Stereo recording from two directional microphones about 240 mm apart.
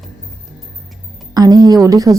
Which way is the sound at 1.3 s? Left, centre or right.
Centre.